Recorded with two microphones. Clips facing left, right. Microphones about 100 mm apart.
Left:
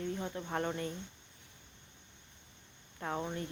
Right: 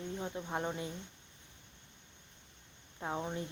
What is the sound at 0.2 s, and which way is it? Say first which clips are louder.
Speech: left 1 dB; 10° right (ahead or behind).